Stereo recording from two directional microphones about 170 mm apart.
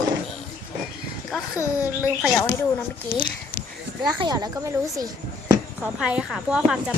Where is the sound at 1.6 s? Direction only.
20° left (ahead or behind).